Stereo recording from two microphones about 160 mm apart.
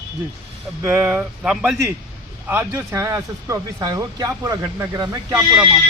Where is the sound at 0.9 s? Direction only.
10° right (ahead or behind).